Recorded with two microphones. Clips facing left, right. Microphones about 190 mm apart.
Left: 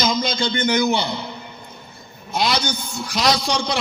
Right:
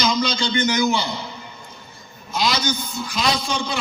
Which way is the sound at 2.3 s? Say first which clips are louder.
Left 1 dB; 65° left (ahead or behind).